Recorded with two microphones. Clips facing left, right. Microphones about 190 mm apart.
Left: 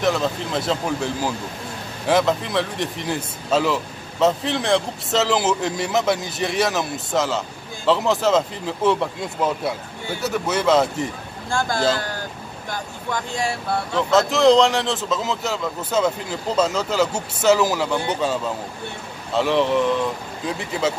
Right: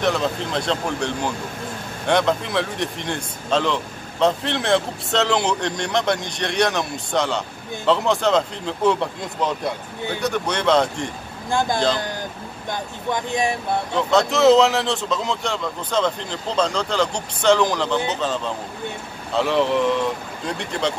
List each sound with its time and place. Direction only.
0.0 s speech: centre (ahead or behind)
11.5 s speech: 20° right (ahead or behind)
13.9 s speech: centre (ahead or behind)